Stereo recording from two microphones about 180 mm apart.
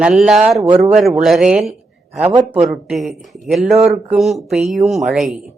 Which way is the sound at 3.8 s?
35° right (ahead or behind).